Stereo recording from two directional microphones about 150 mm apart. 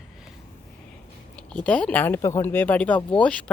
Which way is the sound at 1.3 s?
10° left (ahead or behind).